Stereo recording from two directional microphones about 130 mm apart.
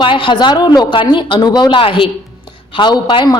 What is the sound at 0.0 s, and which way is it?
A woman's voice, 40° left (ahead or behind).